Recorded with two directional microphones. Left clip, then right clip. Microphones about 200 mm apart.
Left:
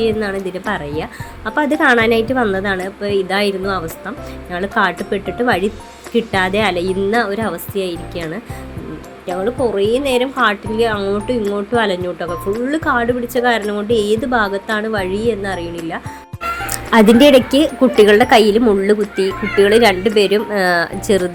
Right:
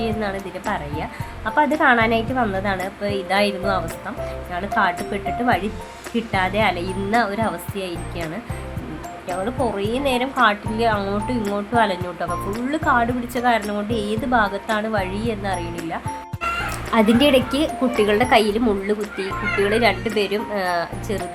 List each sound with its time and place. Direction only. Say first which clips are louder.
0.0 s a woman's voice: left 7 dB; 20° left (ahead or behind)
9.4 s a woman's voice: left 7 dB; 15° left (ahead or behind)